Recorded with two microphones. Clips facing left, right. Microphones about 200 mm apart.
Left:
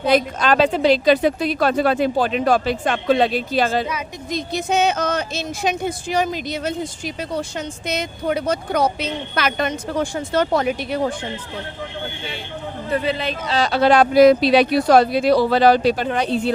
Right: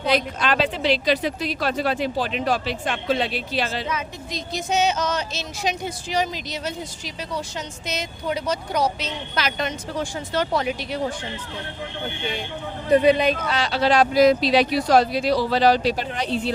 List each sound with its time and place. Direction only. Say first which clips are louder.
0.3 s speech: left 6 dB; 45° left (ahead or behind)
12.9 s a man's voice: right 6 dB; 15° right (ahead or behind)
13.7 s speech: left 4 dB; 55° left (ahead or behind)